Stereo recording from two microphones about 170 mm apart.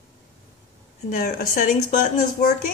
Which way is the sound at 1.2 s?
55° left (ahead or behind).